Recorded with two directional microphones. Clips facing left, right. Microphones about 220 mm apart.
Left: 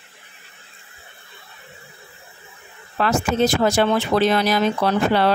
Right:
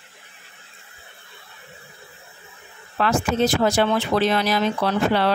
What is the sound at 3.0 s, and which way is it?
Speech, 40° left (ahead or behind).